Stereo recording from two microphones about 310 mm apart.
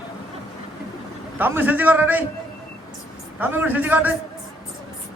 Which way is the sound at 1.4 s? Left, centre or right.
Centre.